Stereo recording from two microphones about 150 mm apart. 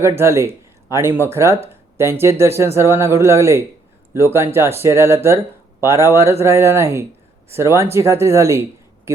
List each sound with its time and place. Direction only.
0.0 s speech: 15° right (ahead or behind)